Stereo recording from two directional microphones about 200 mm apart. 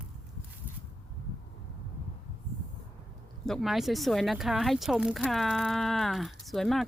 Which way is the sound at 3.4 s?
Centre (ahead or behind).